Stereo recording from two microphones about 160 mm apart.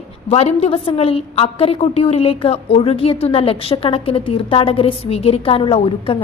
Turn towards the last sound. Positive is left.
turn(degrees=35)  # may be behind; listen again after turning